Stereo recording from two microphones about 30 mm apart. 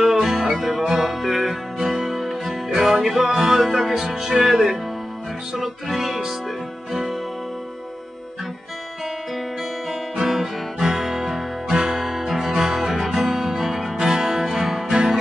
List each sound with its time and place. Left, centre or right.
0.0 s music: centre
1.8 s music: centre
9.8 s music: centre
11.7 s music: right
12.0 s music: centre
13.9 s music: right